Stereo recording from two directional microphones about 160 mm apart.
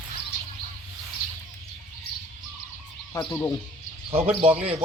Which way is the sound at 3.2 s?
20° left (ahead or behind).